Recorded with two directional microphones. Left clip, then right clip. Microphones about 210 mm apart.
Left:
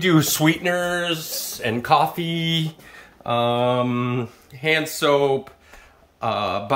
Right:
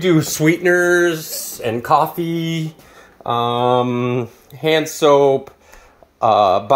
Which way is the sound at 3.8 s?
Centre (ahead or behind).